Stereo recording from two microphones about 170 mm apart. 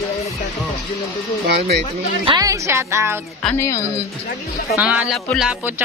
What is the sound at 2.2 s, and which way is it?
Speech, 25° right (ahead or behind).